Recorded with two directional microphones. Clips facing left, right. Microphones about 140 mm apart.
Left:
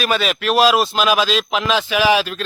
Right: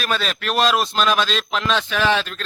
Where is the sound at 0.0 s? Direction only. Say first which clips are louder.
Left 5 dB; 5° left (ahead or behind).